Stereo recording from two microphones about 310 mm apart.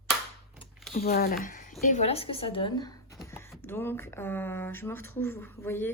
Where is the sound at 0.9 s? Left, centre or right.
Left; by 5.9 s centre.